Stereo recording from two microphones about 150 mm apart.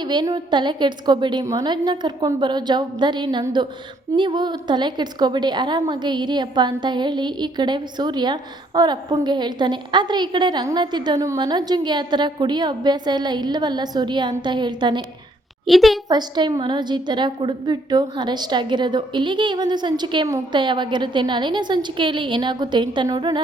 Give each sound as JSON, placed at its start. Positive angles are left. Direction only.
{"t": 0.0, "sound": "a woman's voice", "side_deg": -30}
{"t": 15.6, "sound": "a woman's voice", "side_deg": 0}
{"t": 16.0, "sound": "a woman's voice", "side_deg": -30}